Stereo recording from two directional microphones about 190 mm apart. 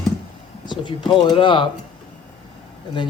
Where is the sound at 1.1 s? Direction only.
25° left (ahead or behind).